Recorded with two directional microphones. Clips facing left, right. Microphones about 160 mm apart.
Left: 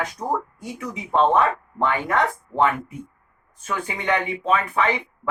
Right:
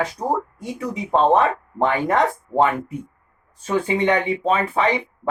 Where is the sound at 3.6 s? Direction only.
30° right (ahead or behind).